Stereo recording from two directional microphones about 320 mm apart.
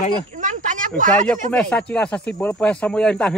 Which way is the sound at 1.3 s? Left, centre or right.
Centre.